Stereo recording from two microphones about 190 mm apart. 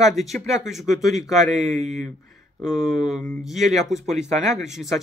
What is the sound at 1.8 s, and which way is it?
Speech, 40° right (ahead or behind).